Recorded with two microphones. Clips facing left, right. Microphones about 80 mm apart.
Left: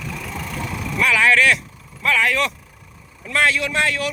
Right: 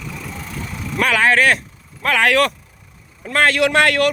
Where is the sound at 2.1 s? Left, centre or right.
Right.